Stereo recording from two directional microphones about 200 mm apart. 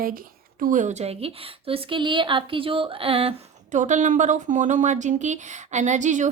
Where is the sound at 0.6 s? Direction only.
40° right (ahead or behind).